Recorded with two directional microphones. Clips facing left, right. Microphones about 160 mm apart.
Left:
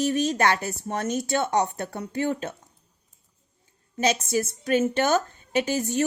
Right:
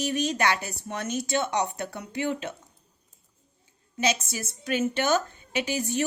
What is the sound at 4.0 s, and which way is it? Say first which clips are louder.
A woman's voice: left 4 dB; 45° left (ahead or behind).